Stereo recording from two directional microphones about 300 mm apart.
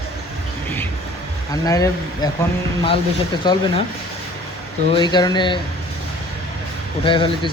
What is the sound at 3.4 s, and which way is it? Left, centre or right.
Speech, centre.